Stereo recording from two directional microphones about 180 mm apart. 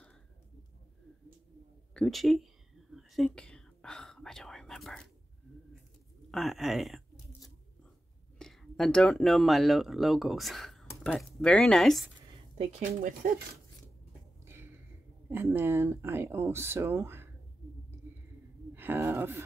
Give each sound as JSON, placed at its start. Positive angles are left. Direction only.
{"t": 2.0, "sound": "speech", "side_deg": 0}
{"t": 2.9, "sound": "whispering", "side_deg": 0}
{"t": 6.3, "sound": "speech", "side_deg": 0}
{"t": 8.4, "sound": "speech", "side_deg": 5}
{"t": 12.5, "sound": "speech", "side_deg": -45}
{"t": 14.4, "sound": "a sound", "side_deg": -15}
{"t": 15.2, "sound": "speech", "side_deg": -15}
{"t": 18.8, "sound": "speech", "side_deg": -10}